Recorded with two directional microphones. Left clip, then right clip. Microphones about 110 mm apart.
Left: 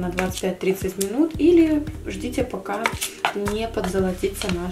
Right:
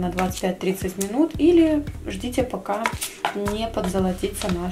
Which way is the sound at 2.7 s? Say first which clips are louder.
Even; centre (ahead or behind).